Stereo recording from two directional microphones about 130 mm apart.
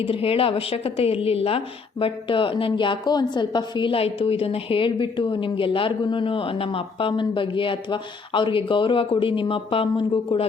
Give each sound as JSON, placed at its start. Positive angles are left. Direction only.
{"t": 0.0, "sound": "a woman's voice", "side_deg": 45}